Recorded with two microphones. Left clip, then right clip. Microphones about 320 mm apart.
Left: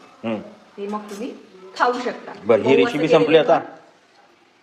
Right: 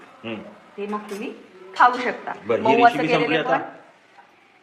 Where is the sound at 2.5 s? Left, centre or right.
Centre.